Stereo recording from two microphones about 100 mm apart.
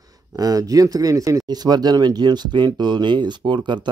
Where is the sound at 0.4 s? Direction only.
35° right (ahead or behind).